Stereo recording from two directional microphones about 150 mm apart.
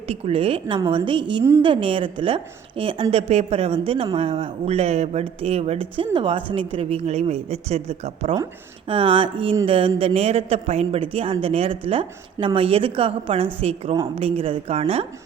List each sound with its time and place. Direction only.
0.1 s a woman's voice: 40° right (ahead or behind)